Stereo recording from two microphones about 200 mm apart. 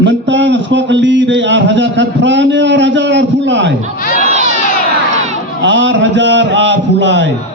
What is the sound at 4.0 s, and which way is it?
Crowd, 40° left (ahead or behind).